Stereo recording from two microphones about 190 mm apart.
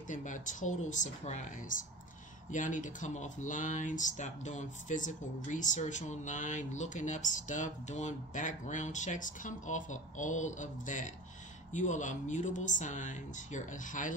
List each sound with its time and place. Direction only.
0.1 s speech: 40° left (ahead or behind)